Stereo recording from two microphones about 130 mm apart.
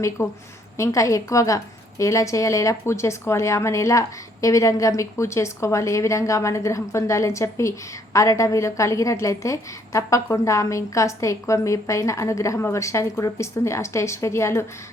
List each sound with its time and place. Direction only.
0.2 s a woman's voice: 20° left (ahead or behind)